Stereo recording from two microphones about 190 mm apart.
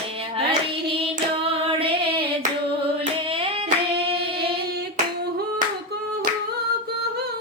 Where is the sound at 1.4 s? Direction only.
30° right (ahead or behind).